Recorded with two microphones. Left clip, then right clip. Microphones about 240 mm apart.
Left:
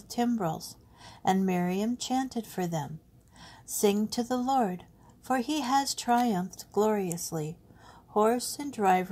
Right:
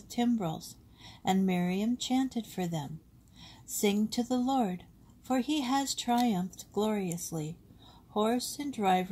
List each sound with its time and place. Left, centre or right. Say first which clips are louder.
0.1 s speech: left 2 dB; left